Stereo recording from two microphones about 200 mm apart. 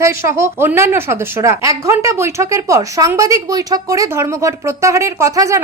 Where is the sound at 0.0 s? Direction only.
15° right (ahead or behind).